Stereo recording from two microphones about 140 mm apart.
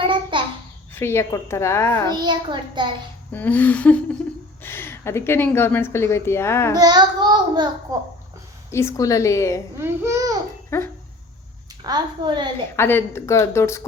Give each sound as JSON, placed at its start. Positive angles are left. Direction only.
{"t": 0.1, "sound": "babbling", "side_deg": -35}
{"t": 0.9, "sound": "speech", "side_deg": 20}
{"t": 2.1, "sound": "a child's voice", "side_deg": -30}
{"t": 3.3, "sound": "speech", "side_deg": 10}
{"t": 6.7, "sound": "a child's voice", "side_deg": -30}
{"t": 8.7, "sound": "speech", "side_deg": 20}
{"t": 9.7, "sound": "a child's voice", "side_deg": -20}
{"t": 10.7, "sound": "speech", "side_deg": 20}
{"t": 11.8, "sound": "a child's voice", "side_deg": -30}
{"t": 12.7, "sound": "speech", "side_deg": 15}